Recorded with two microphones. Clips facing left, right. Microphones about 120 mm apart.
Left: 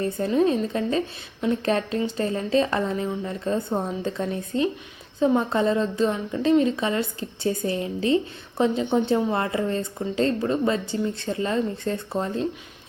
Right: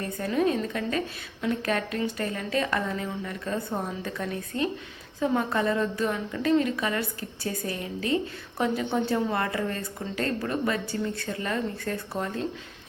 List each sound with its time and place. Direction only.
0.0 s a woman's voice: 25° left (ahead or behind)